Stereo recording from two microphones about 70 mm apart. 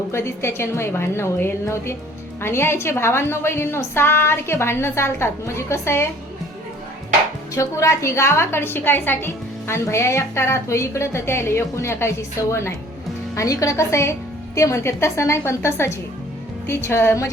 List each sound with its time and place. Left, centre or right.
0.1 s a woman's voice: left
7.5 s a woman's voice: left
13.3 s a woman's voice: left